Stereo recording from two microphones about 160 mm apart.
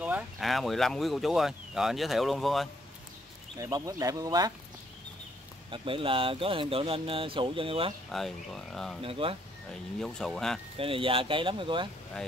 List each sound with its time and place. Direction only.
0.0 s speech: 5° right (ahead or behind)
3.5 s speech: 20° right (ahead or behind)
5.7 s speech: 35° right (ahead or behind)
8.1 s speech: centre (ahead or behind)
9.0 s speech: 35° right (ahead or behind)
9.7 s speech: 5° left (ahead or behind)
10.8 s speech: 35° right (ahead or behind)